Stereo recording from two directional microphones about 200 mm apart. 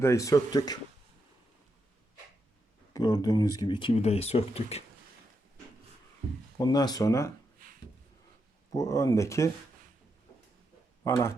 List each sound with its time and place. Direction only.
0.0 s speech: 15° left (ahead or behind)
2.9 s speech: 20° left (ahead or behind)
6.6 s speech: 20° left (ahead or behind)
7.6 s a sound: 45° right (ahead or behind)
8.7 s speech: 15° left (ahead or behind)
11.0 s speech: 15° left (ahead or behind)